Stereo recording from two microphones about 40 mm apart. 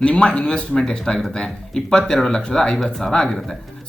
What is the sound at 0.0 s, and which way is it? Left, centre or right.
Speech, left.